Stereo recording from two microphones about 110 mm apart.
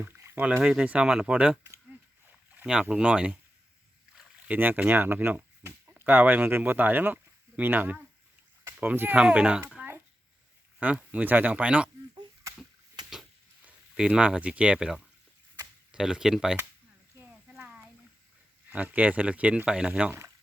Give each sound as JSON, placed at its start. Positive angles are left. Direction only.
{"t": 0.0, "sound": "rowboat", "side_deg": -20}
{"t": 0.6, "sound": "speech", "side_deg": -10}
{"t": 2.8, "sound": "speech", "side_deg": -10}
{"t": 4.1, "sound": "rowboat", "side_deg": -5}
{"t": 4.5, "sound": "speech", "side_deg": -15}
{"t": 9.7, "sound": "a sound", "side_deg": -20}
{"t": 10.8, "sound": "speech", "side_deg": -10}
{"t": 12.1, "sound": "chop", "side_deg": -30}
{"t": 13.7, "sound": "speech", "side_deg": -10}
{"t": 18.7, "sound": "speech", "side_deg": -15}